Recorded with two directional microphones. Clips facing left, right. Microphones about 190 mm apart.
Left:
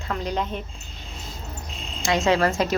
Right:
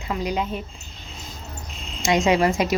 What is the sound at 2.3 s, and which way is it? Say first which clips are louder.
Speech: even; 15° right (ahead or behind).